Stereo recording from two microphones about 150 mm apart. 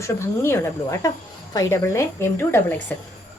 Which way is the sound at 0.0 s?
15° left (ahead or behind).